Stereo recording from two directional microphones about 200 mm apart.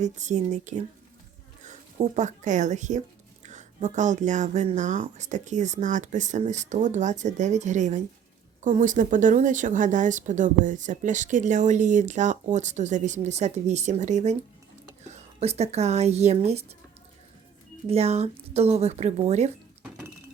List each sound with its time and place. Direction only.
0.0 s speech: 35° right (ahead or behind)
17.8 s speech: 30° right (ahead or behind)